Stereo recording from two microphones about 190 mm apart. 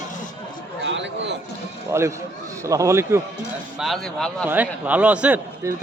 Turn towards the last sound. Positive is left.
turn(degrees=-10)  # may be behind; listen again after turning